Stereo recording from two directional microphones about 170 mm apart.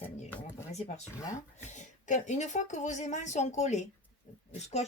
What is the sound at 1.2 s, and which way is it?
Speech, 20° left (ahead or behind).